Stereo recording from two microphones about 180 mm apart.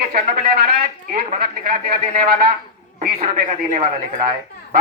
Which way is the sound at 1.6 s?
55° right (ahead or behind).